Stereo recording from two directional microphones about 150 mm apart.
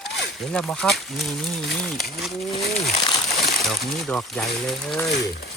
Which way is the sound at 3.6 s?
Centre (ahead or behind).